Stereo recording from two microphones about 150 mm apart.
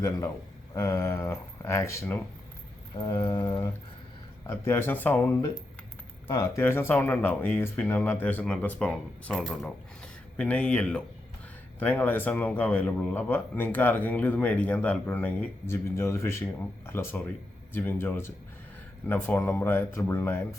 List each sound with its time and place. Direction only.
0.7 s speech: 20° left (ahead or behind)
2.9 s a sound: 30° left (ahead or behind)
4.4 s a man's voice: 15° left (ahead or behind)
6.4 s a man's voice: 15° left (ahead or behind)